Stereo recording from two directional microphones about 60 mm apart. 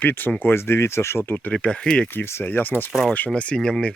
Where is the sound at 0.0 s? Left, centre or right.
Left.